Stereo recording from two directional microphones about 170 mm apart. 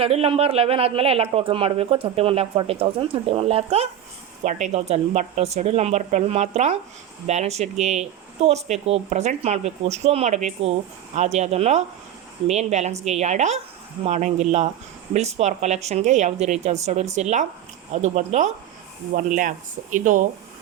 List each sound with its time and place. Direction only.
0.0 s speech: 35° right (ahead or behind); by 20.2 s 50° right (ahead or behind)